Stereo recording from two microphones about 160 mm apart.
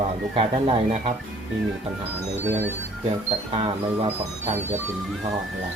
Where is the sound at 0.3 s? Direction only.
40° right (ahead or behind).